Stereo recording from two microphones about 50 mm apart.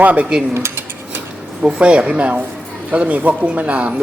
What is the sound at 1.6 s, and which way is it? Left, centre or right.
Speech, right.